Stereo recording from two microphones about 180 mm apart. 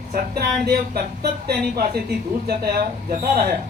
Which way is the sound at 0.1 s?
60° right (ahead or behind).